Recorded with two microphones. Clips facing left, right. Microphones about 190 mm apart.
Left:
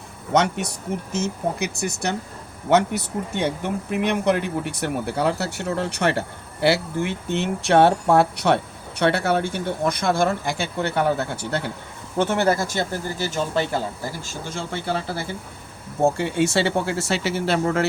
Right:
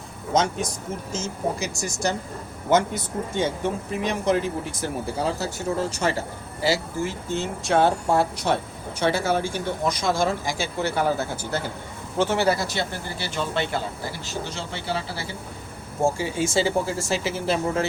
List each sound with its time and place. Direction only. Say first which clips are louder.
0.3 s speech: left 2 dB; 65° left (ahead or behind)
12.2 s speech: left 1 dB; 55° left (ahead or behind)
16.0 s speech: left 4 dB; 60° left (ahead or behind)